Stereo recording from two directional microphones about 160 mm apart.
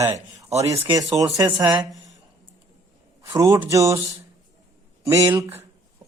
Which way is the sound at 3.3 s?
20° right (ahead or behind).